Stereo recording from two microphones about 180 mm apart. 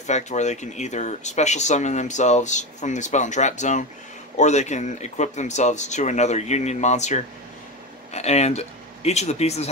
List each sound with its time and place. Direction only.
0.0 s speech: 40° left (ahead or behind)